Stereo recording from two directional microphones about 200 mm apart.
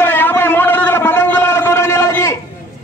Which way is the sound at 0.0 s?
10° left (ahead or behind).